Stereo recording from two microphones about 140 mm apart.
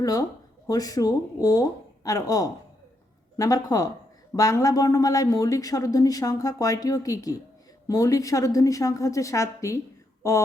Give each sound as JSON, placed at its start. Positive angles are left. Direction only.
{"t": 0.0, "sound": "speech", "side_deg": 25}